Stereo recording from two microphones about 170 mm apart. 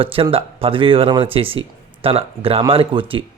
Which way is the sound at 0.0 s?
35° right (ahead or behind).